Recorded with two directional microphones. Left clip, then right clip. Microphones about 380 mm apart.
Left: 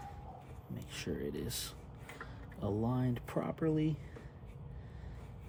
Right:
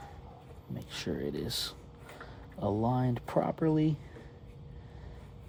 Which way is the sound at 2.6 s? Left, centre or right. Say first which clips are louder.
Right 6 dB; right.